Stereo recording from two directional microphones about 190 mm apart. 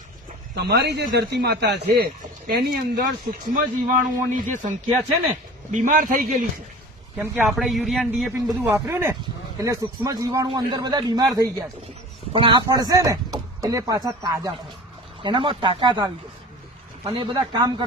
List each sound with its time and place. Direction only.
0.5 s speech: 60° right (ahead or behind)
3.5 s a man's voice: 45° right (ahead or behind)
5.7 s a man's voice: 45° right (ahead or behind)
7.2 s a man's voice: 5° right (ahead or behind)
8.3 s speech: 15° right (ahead or behind)